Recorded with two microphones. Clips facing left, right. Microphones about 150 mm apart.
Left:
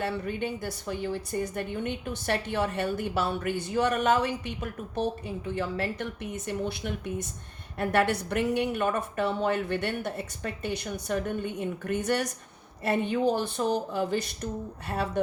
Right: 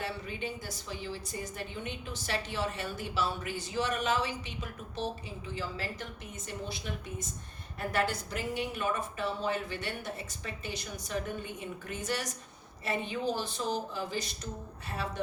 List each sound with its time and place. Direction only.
0.0 s a woman's voice: 55° left (ahead or behind)